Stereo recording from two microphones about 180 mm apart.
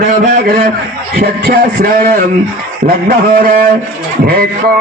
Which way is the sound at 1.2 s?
60° right (ahead or behind).